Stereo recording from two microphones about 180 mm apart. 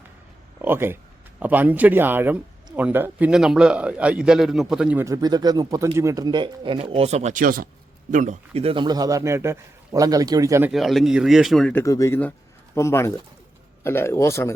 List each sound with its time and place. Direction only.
0.6 s a man's voice: 10° right (ahead or behind)
5.0 s speech: 20° right (ahead or behind)
10.7 s a man's voice: centre (ahead or behind)
11.7 s a man's voice: 15° left (ahead or behind)